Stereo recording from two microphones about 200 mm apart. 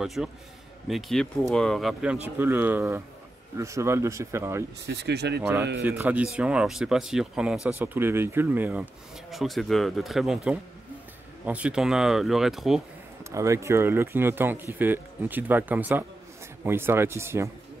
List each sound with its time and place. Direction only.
0.0 s speech: centre (ahead or behind)
4.8 s speech: 55° right (ahead or behind)
5.4 s speech: 10° right (ahead or behind)
13.2 s speech: 15° right (ahead or behind)